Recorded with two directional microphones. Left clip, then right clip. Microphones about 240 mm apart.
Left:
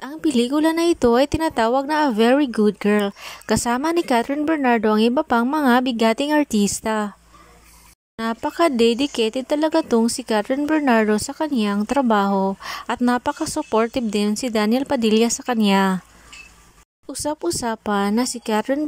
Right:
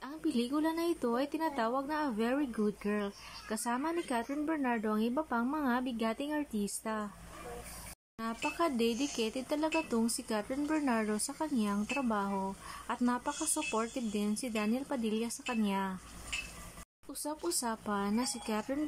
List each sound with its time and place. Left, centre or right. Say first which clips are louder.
0.0 s speech: left 15 dB; left
8.2 s speech: left 14 dB; left
17.1 s speech: left 14 dB; left